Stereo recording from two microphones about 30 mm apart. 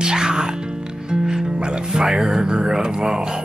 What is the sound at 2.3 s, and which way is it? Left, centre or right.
Speech, right.